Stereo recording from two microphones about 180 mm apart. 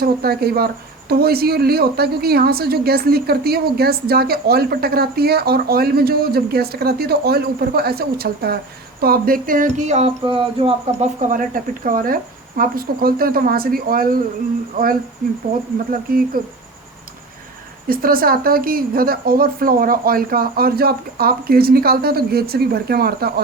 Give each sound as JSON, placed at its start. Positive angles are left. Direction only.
{"t": 0.0, "sound": "speech", "side_deg": -55}
{"t": 9.0, "sound": "a sound", "side_deg": -55}
{"t": 17.8, "sound": "speech", "side_deg": -55}